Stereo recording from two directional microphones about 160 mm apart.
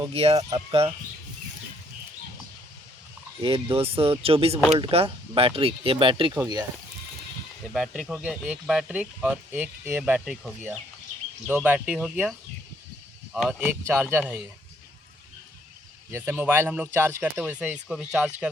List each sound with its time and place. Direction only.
0.1 s speech: 40° right (ahead or behind)
3.4 s speech: 35° right (ahead or behind)
6.3 s speech: 25° right (ahead or behind)
7.7 s speech: 5° right (ahead or behind)
10.0 s speech: 5° right (ahead or behind)
16.1 s speech: 15° right (ahead or behind)